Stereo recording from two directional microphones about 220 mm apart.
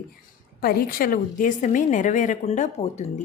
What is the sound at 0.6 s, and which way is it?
A woman's voice, 40° left (ahead or behind).